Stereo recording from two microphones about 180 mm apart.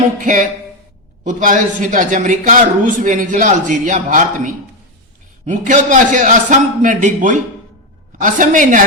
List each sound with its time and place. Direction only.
0.2 s speech: 45° right (ahead or behind)